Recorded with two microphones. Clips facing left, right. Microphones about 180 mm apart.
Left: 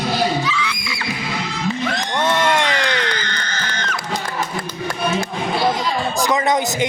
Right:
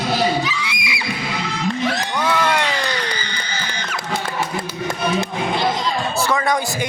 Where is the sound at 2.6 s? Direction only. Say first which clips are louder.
Left 2 dB; 10° right (ahead or behind).